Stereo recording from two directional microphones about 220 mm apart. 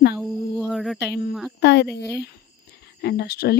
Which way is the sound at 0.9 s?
50° left (ahead or behind).